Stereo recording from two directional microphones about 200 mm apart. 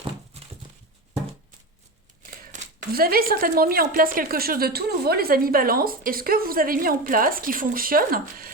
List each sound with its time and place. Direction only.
2.4 s speech: 45° right (ahead or behind)